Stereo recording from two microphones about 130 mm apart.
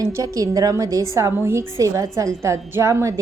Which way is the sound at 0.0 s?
25° right (ahead or behind).